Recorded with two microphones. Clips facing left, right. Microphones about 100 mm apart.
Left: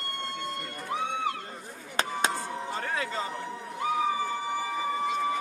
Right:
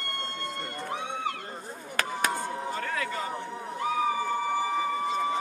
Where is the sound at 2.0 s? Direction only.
25° left (ahead or behind).